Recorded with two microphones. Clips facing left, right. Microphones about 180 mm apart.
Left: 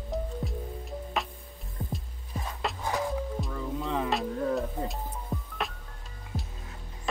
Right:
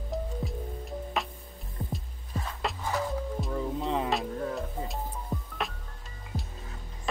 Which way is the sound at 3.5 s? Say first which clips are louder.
Right 2 dB; 35° right (ahead or behind).